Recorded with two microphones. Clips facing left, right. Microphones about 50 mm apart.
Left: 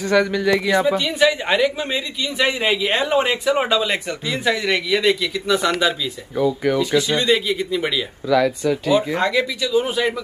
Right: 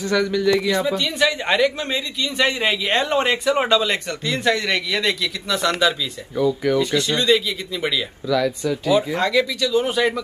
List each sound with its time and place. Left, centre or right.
0.0 s a man's voice: left; by 7.2 s centre
7.2 s a man's voice: left; by 10.2 s centre